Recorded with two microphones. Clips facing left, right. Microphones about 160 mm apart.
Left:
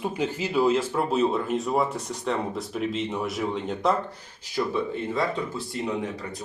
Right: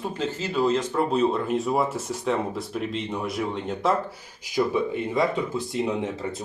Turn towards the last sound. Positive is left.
turn(degrees=-25)  # may be behind; listen again after turning